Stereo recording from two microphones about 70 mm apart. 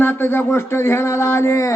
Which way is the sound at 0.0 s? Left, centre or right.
Left.